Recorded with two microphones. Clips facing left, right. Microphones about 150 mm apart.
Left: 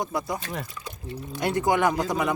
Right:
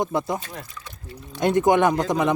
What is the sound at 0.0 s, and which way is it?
Speech, 20° right (ahead or behind).